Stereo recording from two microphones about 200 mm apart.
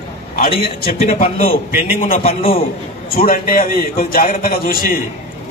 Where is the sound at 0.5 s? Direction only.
35° left (ahead or behind).